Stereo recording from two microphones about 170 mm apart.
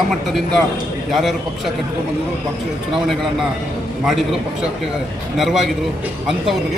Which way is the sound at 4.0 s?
Centre (ahead or behind).